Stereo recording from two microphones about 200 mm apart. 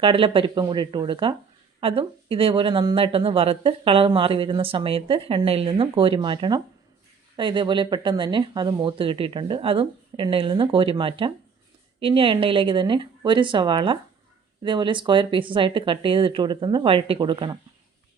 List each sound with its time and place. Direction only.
0.0 s speech: 25° right (ahead or behind)